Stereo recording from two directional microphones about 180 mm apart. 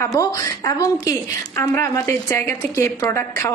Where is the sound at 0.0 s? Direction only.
15° left (ahead or behind).